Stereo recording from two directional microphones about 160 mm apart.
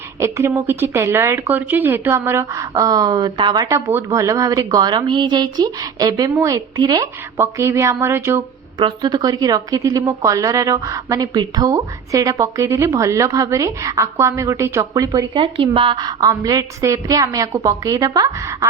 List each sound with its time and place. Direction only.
0.2 s a woman's voice: 15° right (ahead or behind)
8.8 s a woman's voice: 25° right (ahead or behind)
15.4 s a woman's voice: 30° right (ahead or behind)